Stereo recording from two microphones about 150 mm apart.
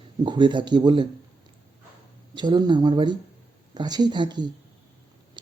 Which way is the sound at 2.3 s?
30° right (ahead or behind).